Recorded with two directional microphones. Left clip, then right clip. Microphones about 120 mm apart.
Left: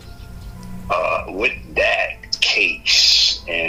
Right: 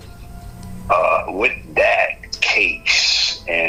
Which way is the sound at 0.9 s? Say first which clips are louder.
Right 4 dB; 30° left (ahead or behind).